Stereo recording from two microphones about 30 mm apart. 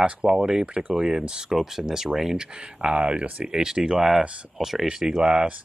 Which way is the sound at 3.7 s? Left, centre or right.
Right.